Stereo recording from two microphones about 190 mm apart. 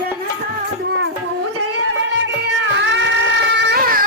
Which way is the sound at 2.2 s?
85° right.